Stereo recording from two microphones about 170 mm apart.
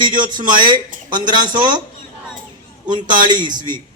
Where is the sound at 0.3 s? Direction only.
25° right (ahead or behind).